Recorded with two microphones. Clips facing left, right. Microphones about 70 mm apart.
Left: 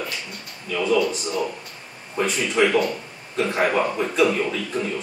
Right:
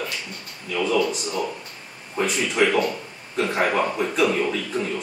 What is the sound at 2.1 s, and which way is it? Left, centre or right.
Speech, centre.